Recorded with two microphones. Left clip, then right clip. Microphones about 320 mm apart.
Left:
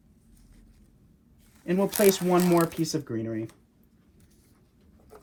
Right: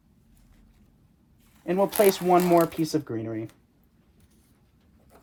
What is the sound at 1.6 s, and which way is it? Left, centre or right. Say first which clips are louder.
Speech: right 2 dB; centre.